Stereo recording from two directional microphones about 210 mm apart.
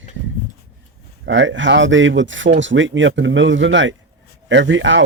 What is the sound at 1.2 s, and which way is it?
Speech, 60° right (ahead or behind).